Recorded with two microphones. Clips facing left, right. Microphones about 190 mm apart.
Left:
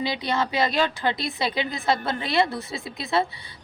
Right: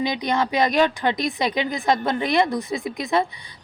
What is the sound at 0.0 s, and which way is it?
Speech, 15° right (ahead or behind).